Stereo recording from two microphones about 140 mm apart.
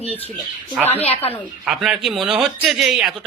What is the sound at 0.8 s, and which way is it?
Speech, 45° left (ahead or behind).